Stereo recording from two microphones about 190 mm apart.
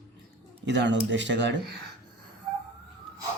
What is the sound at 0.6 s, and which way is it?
Speech, 70° right (ahead or behind).